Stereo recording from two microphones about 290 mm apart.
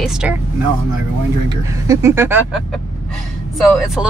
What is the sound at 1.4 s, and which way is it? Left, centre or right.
Speech, centre.